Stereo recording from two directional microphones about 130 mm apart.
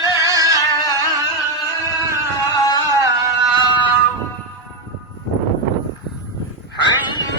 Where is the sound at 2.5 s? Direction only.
30° left (ahead or behind).